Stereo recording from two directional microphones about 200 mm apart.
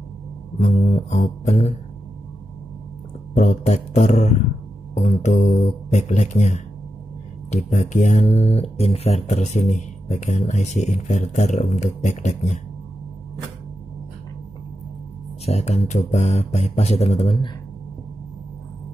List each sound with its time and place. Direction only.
0.6 s speech: 35° left (ahead or behind)
3.3 s speech: 35° left (ahead or behind)
15.4 s speech: 30° left (ahead or behind)